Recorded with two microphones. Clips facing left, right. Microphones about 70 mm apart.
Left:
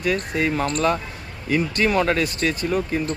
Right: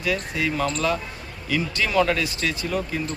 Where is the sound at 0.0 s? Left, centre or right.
Left.